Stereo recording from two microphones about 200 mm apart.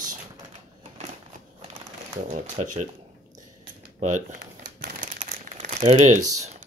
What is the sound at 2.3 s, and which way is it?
Speech, 35° right (ahead or behind).